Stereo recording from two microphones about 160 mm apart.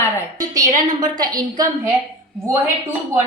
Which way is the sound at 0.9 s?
25° right (ahead or behind).